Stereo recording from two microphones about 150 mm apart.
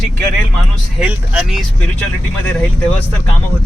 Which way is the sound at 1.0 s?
5° right (ahead or behind).